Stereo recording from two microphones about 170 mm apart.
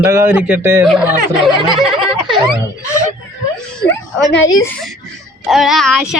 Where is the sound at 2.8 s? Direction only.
15° left (ahead or behind).